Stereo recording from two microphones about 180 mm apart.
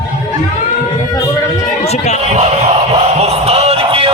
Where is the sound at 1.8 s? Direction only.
35° left (ahead or behind).